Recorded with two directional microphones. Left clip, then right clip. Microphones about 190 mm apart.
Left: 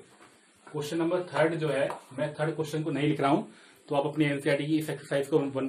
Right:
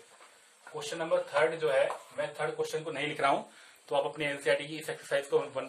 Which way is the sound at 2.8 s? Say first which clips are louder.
Left 4 dB; 5° left (ahead or behind).